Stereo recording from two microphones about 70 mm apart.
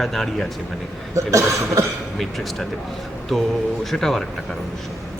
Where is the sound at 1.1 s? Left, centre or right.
Right.